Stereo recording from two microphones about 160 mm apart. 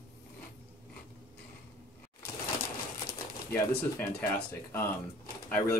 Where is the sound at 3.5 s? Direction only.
15° left (ahead or behind).